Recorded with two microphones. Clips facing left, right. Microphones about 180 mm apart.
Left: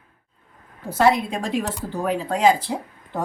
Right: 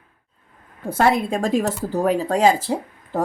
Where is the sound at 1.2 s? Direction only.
45° right (ahead or behind).